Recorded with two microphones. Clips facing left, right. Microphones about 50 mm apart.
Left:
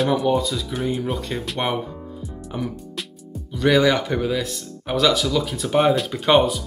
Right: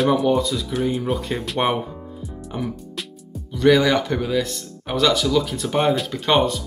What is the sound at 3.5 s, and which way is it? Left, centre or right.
Speech, centre.